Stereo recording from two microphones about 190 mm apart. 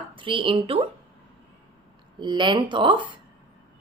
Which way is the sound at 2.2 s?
25° right (ahead or behind).